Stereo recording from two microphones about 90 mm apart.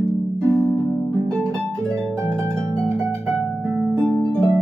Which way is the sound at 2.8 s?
10° left (ahead or behind).